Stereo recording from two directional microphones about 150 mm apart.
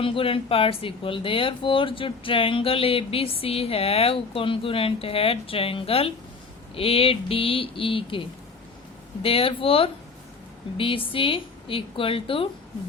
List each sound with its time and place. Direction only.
0.0 s speech: 35° left (ahead or behind)
9.2 s speech: 40° left (ahead or behind)